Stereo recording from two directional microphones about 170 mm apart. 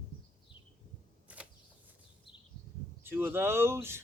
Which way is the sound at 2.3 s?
30° left (ahead or behind).